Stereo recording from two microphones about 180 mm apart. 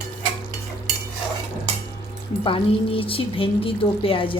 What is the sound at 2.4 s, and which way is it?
Speech, 30° left (ahead or behind).